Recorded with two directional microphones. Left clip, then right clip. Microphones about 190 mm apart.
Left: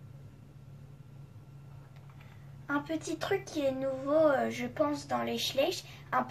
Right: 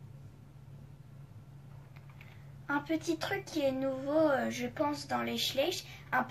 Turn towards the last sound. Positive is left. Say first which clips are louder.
# left 1 dB
turn(degrees=15)  # may be behind; listen again after turning